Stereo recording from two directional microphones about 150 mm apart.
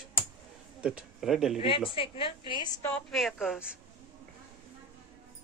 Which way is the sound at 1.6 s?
35° left (ahead or behind).